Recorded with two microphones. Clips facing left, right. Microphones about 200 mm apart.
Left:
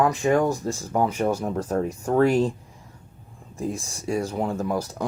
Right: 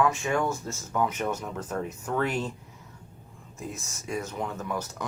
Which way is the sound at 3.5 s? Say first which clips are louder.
Left 9 dB; 35° left (ahead or behind).